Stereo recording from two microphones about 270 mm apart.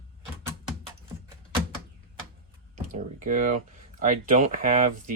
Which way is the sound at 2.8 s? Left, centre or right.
Right.